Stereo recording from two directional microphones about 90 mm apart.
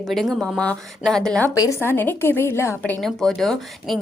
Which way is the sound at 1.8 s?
25° left (ahead or behind).